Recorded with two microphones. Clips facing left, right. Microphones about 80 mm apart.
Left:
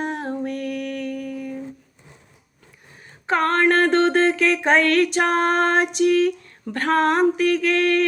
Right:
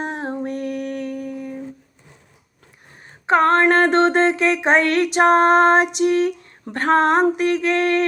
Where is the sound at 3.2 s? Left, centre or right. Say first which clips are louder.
Right 4 dB; right.